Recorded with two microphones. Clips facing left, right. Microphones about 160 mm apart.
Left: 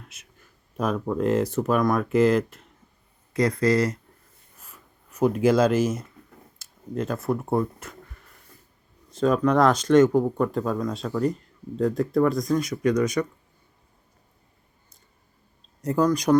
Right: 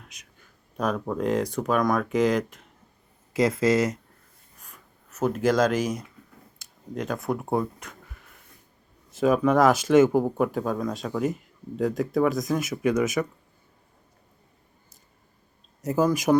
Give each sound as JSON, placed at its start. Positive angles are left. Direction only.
{"t": 0.0, "sound": "speech", "side_deg": 5}
{"t": 4.6, "sound": "writing", "side_deg": 10}
{"t": 5.3, "sound": "speech", "side_deg": 10}
{"t": 6.6, "sound": "a sound", "side_deg": 0}
{"t": 9.1, "sound": "speech", "side_deg": -5}
{"t": 15.8, "sound": "speech", "side_deg": -5}